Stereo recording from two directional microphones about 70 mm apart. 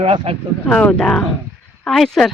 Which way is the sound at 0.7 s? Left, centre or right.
Centre.